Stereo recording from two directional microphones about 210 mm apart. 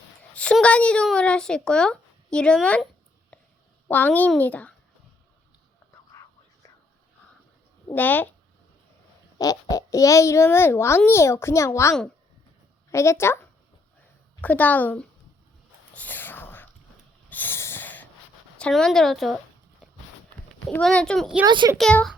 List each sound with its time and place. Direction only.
0.3 s speech: 5° left (ahead or behind)
3.8 s a child's voice: 10° left (ahead or behind)
7.9 s a child's voice: 10° left (ahead or behind)
9.4 s a child's voice: 15° left (ahead or behind)
16.0 s whispering: 10° left (ahead or behind)
17.2 s snort: 10° left (ahead or behind)
18.5 s speech: 5° left (ahead or behind)
20.5 s a child's voice: centre (ahead or behind)
21.4 s a child's voice: 20° right (ahead or behind)
21.8 s speech: centre (ahead or behind)